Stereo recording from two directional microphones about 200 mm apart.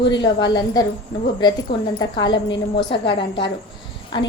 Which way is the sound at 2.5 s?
60° left (ahead or behind).